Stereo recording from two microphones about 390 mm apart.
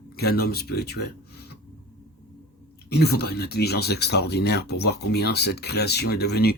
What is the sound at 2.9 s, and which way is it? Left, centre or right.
Speech, left.